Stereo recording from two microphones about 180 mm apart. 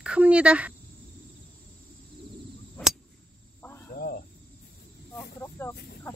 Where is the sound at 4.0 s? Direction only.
60° left (ahead or behind).